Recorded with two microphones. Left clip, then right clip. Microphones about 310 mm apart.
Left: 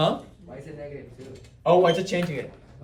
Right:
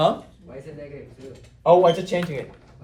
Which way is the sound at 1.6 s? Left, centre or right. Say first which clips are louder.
Right 3 dB; centre.